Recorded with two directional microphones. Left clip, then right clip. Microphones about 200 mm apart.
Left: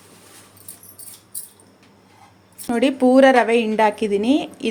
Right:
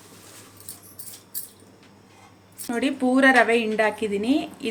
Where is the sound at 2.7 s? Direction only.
35° left (ahead or behind).